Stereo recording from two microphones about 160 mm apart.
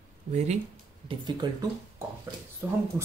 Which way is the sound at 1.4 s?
25° right (ahead or behind).